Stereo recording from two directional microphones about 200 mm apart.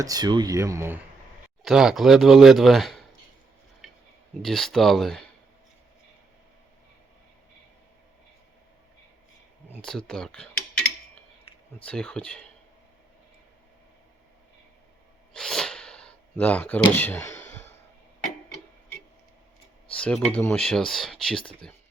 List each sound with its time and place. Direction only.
0.0 s speech: 20° right (ahead or behind)
1.6 s speech: 5° right (ahead or behind)
4.4 s speech: centre (ahead or behind)
10.1 s cutlery: 5° left (ahead or behind)
11.8 s speech: 5° left (ahead or behind)
15.3 s gasp: centre (ahead or behind)
19.9 s speech: 5° left (ahead or behind)